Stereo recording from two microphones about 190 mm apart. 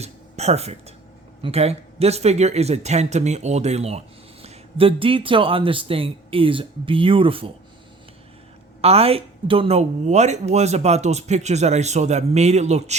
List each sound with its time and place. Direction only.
0.0 s a woman's voice: 35° right (ahead or behind)
8.8 s a woman's voice: 30° right (ahead or behind)